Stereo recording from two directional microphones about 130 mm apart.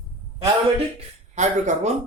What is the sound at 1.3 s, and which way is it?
Speech, 65° right (ahead or behind).